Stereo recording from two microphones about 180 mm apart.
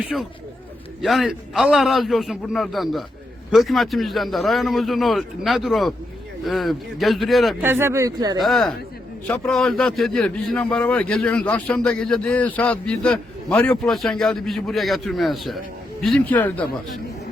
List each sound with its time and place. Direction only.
0.1 s a man's voice: centre (ahead or behind)
7.6 s speech: 15° right (ahead or behind)
8.4 s a man's voice: centre (ahead or behind)